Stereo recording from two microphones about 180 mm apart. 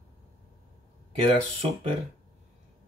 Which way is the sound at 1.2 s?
30° right (ahead or behind).